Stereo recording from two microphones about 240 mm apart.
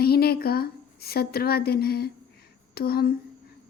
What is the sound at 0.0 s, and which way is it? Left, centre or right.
A woman's voice, left.